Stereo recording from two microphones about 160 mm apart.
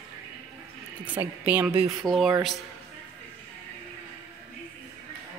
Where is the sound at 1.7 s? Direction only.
35° right (ahead or behind).